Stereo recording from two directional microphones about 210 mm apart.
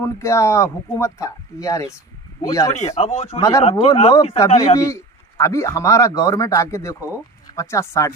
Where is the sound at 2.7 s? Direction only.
30° left (ahead or behind).